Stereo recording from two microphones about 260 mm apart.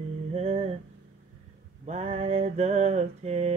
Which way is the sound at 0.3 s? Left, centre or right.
Right.